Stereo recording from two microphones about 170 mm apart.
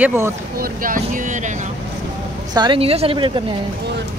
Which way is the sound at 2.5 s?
25° right (ahead or behind).